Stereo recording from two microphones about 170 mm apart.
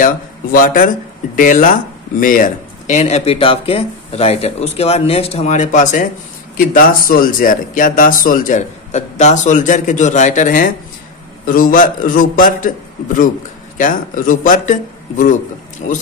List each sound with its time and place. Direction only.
0.0 s speech: 55° left (ahead or behind)
13.7 s speech: 55° left (ahead or behind)